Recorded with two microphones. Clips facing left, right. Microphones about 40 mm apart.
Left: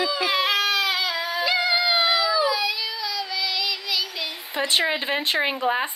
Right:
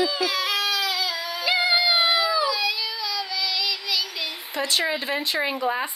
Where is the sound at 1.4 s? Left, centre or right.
Centre.